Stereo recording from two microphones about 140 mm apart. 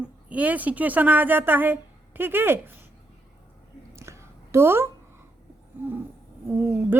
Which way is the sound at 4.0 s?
20° right (ahead or behind).